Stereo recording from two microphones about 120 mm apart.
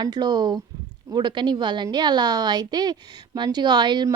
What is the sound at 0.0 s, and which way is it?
A woman's voice, 35° right (ahead or behind).